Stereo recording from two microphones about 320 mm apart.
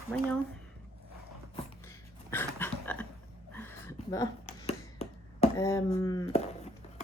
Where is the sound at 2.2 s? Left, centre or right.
Centre.